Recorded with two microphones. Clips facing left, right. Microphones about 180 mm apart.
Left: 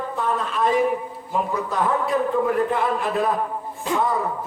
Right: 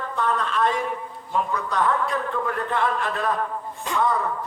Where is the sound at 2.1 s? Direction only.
15° left (ahead or behind).